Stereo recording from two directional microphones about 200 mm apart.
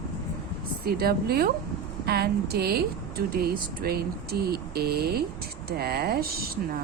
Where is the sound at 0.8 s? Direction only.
50° right (ahead or behind).